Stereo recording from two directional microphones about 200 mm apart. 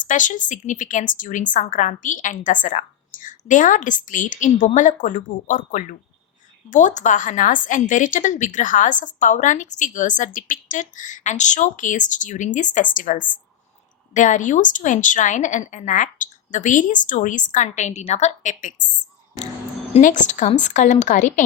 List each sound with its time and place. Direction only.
0.0 s a woman's voice: 40° left (ahead or behind)
19.9 s a woman's voice: 40° left (ahead or behind)